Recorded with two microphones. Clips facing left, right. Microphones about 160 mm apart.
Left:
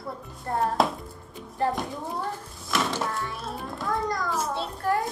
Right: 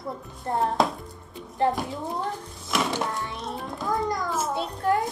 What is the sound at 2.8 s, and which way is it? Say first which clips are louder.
Speech: right 1 dB; 15° right (ahead or behind).